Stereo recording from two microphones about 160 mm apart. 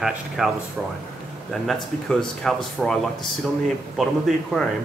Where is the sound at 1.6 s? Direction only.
5° left (ahead or behind).